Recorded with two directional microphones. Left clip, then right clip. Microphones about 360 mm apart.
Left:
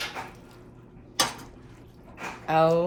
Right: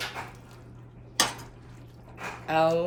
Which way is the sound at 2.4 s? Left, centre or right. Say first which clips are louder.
Left 2 dB; centre.